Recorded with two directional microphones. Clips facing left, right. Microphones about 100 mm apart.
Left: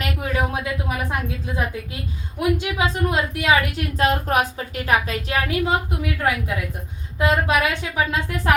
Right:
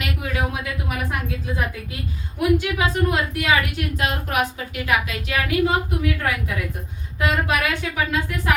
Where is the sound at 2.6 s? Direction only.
25° left (ahead or behind).